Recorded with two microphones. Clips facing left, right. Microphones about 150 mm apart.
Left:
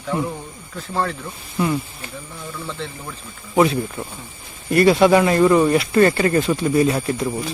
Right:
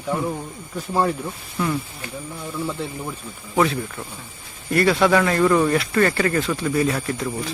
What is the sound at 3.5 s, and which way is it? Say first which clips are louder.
Speech: left 4 dB; 20° left (ahead or behind).